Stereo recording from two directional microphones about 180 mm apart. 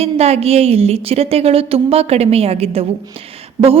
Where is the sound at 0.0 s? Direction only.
35° right (ahead or behind).